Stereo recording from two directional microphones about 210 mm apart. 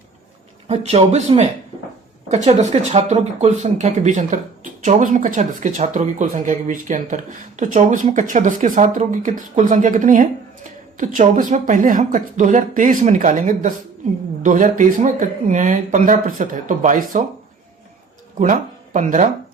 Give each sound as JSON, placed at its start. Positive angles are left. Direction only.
{"t": 0.7, "sound": "speech", "side_deg": -30}
{"t": 18.3, "sound": "speech", "side_deg": -35}